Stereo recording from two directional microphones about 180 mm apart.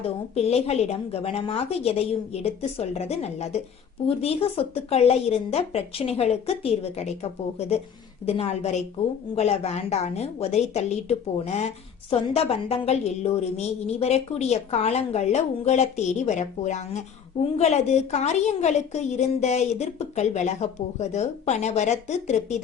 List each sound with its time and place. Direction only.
0.0 s a woman's voice: 35° left (ahead or behind)
8.3 s a woman's voice: 35° left (ahead or behind)